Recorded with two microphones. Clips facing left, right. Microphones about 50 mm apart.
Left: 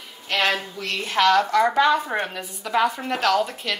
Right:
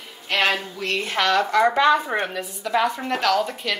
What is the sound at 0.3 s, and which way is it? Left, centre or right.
Speech, centre.